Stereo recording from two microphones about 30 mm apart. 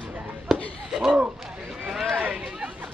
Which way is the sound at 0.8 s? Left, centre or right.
Centre.